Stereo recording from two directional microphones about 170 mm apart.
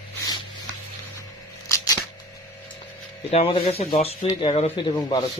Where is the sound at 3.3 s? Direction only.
35° left (ahead or behind).